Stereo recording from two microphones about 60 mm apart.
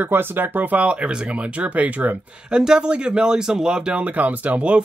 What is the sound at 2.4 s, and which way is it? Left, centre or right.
Speech, centre.